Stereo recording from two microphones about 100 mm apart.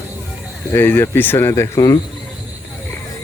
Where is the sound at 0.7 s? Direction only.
20° left (ahead or behind).